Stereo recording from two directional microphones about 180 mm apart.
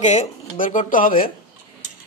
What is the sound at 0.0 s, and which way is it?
A man's voice, 40° left (ahead or behind).